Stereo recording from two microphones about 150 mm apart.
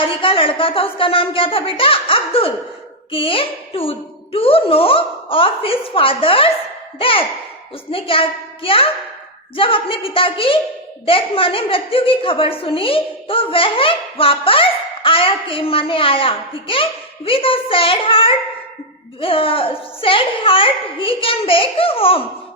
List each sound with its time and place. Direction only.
0.0 s a woman's voice: 35° left (ahead or behind)